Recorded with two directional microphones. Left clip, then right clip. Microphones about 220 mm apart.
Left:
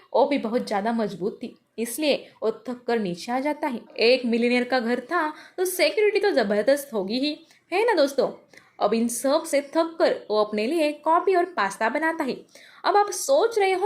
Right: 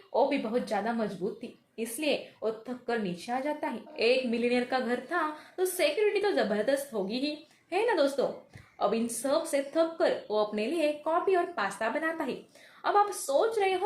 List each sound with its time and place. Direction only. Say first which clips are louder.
0.1 s speech: left 6 dB; 45° left (ahead or behind)